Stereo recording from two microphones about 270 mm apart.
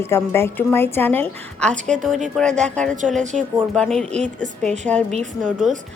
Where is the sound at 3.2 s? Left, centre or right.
Right.